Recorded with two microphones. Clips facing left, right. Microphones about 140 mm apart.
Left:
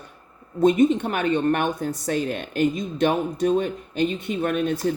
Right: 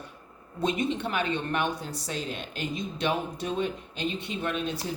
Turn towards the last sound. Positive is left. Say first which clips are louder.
# left 7 dB
turn(degrees=50)  # may be behind; listen again after turning